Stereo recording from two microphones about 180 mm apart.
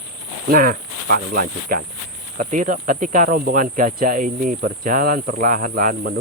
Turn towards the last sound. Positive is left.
turn(degrees=-50)  # may be behind; listen again after turning